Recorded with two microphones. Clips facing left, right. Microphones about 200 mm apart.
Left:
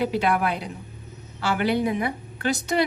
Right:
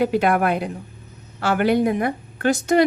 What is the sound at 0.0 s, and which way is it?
A woman's voice, 50° right (ahead or behind).